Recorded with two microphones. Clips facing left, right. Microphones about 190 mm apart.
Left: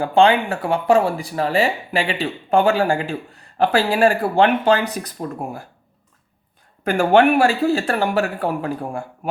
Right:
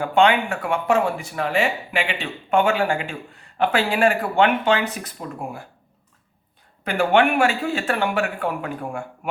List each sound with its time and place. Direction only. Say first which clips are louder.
0.0 s speech: left 3 dB; 30° left (ahead or behind)
6.8 s speech: left 4 dB; 45° left (ahead or behind)